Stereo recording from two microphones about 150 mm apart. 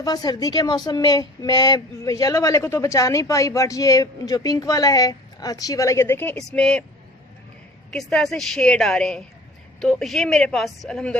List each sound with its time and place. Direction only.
0.0 s a woman's voice: 25° left (ahead or behind); by 6.8 s 5° left (ahead or behind)
7.9 s a woman's voice: 5° left (ahead or behind)